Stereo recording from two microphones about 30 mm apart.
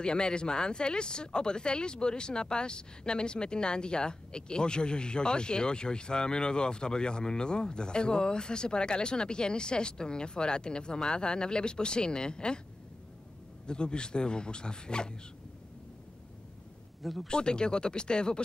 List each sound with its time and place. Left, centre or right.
0.0 s speech: left
13.7 s speech: left
17.0 s speech: centre
17.3 s speech: left